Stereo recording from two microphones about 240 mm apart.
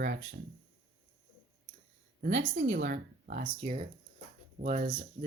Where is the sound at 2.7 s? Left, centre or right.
Right.